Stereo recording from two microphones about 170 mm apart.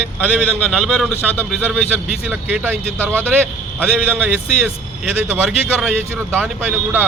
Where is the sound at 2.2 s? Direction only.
10° right (ahead or behind).